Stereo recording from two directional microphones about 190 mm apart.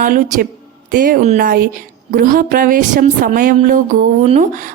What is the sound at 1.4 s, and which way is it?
Speech, 50° right (ahead or behind).